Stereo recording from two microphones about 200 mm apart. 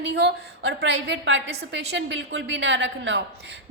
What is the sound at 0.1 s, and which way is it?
A woman's voice, 60° right (ahead or behind).